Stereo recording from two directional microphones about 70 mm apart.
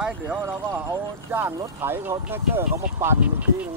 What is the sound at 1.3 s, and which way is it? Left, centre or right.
Speech, right.